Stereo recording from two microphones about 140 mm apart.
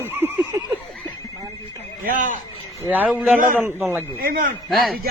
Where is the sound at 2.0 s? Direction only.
70° right (ahead or behind).